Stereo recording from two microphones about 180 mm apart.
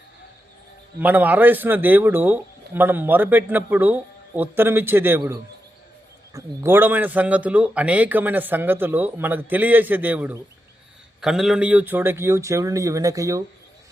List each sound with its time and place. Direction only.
0.9 s speech: 10° right (ahead or behind)